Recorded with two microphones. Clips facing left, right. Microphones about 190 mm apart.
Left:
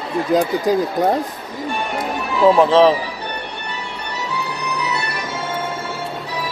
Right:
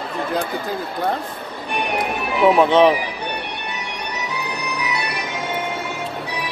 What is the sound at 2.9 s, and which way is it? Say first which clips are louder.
Music: left 1 dB; 15° right (ahead or behind).